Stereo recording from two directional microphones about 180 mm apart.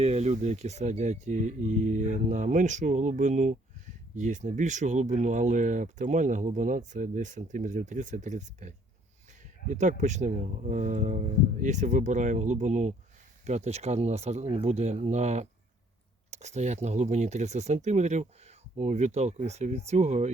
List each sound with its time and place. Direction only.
0.0 s speech: 35° right (ahead or behind)